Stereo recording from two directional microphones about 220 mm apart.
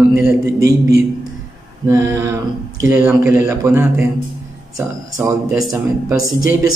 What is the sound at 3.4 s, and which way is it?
A man's voice, 10° right (ahead or behind).